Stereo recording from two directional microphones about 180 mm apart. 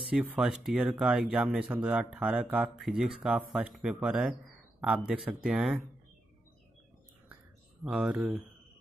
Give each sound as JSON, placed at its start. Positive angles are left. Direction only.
{"t": 0.1, "sound": "speech", "side_deg": -5}
{"t": 7.8, "sound": "speech", "side_deg": -5}